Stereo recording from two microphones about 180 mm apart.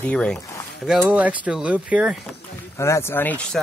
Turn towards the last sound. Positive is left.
turn(degrees=5)  # may be behind; listen again after turning